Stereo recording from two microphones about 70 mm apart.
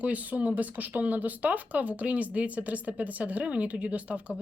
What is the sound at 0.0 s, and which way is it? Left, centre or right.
Speech, right.